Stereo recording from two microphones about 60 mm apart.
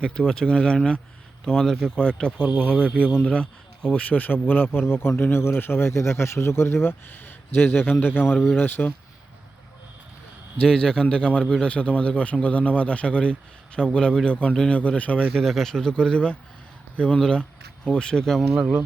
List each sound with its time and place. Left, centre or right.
0.0 s a man's voice: centre; by 5.9 s left
5.9 s speech: left
7.1 s speech: left
10.6 s a man's voice: centre
14.8 s a man's voice: left
15.4 s speech: centre